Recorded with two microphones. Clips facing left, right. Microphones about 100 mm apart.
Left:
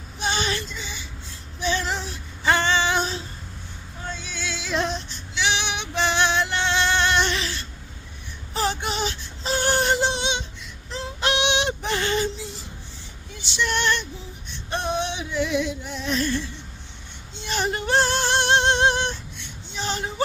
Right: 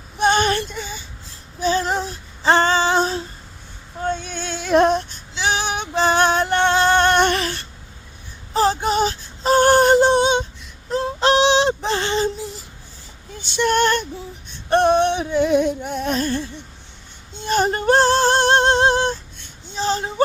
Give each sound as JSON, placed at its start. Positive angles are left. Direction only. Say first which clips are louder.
{"t": 0.2, "sound": "female singing", "louder": "right 9 dB", "side_deg": -50}
{"t": 1.5, "sound": "female singing", "louder": "right 6 dB", "side_deg": -40}
{"t": 4.0, "sound": "a sound", "louder": "right 8 dB", "side_deg": -50}
{"t": 5.3, "sound": "female singing", "louder": "right 3 dB", "side_deg": -40}
{"t": 8.5, "sound": "a sound", "louder": "right 8 dB", "side_deg": -35}
{"t": 11.2, "sound": "female singing", "louder": "right 7 dB", "side_deg": -35}
{"t": 13.3, "sound": "female singing", "louder": "right 7 dB", "side_deg": -50}
{"t": 14.7, "sound": "music", "louder": "right 11 dB", "side_deg": -60}
{"t": 17.3, "sound": "female singing", "louder": "right 7 dB", "side_deg": -45}